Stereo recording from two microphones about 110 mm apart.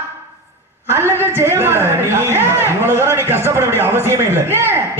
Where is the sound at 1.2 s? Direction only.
20° right (ahead or behind).